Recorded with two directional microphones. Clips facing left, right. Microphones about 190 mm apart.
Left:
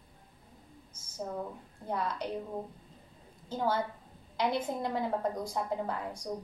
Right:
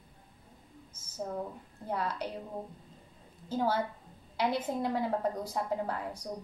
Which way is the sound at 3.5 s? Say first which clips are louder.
Right 1 dB; 5° right (ahead or behind).